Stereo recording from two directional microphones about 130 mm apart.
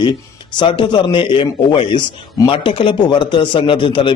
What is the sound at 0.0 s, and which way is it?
A man's voice, 35° left (ahead or behind).